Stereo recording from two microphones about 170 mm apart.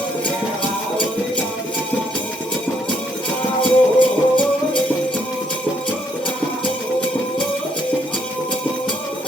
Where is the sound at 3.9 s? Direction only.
30° left (ahead or behind).